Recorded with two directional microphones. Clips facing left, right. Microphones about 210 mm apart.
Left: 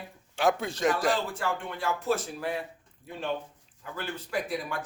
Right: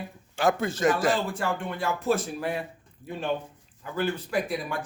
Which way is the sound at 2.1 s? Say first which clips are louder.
Right 4 dB; 15° right (ahead or behind).